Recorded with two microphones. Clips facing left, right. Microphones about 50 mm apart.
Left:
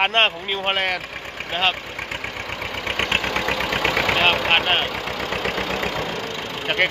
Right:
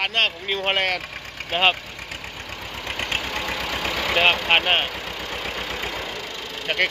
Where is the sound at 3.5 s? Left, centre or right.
Left.